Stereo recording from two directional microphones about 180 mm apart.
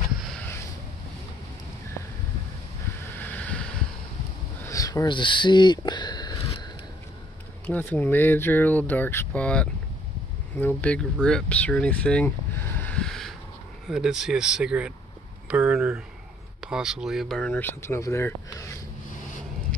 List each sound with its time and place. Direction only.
3.2 s a sound: 10° left (ahead or behind)
4.6 s speech: 20° left (ahead or behind)
7.6 s speech: 10° left (ahead or behind)